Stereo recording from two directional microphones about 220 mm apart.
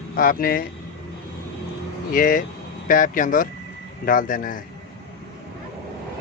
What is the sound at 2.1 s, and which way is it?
Speech, 40° left (ahead or behind).